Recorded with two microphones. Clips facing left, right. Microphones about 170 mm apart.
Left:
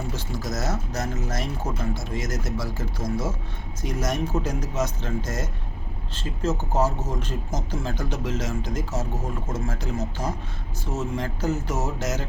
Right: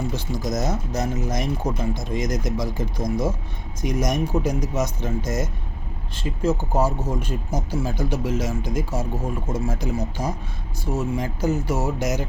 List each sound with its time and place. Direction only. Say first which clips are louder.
0.1 s speech: right 4 dB; 15° right (ahead or behind)